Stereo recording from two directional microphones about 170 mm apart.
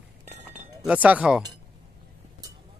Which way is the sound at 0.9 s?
10° right (ahead or behind).